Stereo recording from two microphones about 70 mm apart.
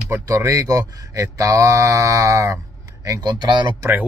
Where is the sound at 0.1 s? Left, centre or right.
Right.